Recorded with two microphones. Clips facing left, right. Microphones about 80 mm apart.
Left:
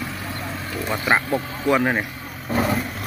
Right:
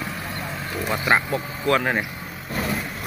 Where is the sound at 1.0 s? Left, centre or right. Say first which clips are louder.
Left 1 dB; centre.